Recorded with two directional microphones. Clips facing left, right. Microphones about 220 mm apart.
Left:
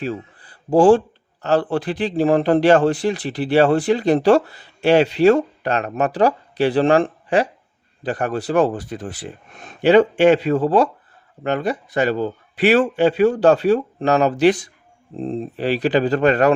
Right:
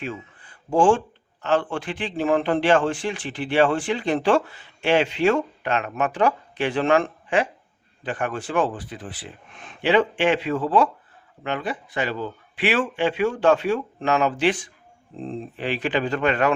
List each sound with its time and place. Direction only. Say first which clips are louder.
0.0 s speech: left 6 dB; 35° left (ahead or behind)